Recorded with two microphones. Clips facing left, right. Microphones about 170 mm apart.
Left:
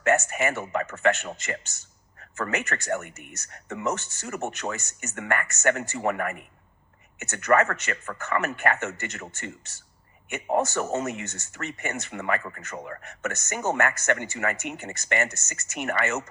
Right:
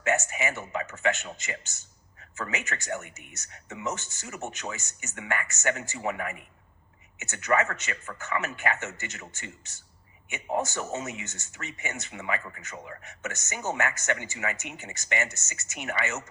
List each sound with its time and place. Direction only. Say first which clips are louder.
0.0 s speech: left 4 dB; 55° left (ahead or behind)
10.2 s speech: left 5 dB; 60° left (ahead or behind)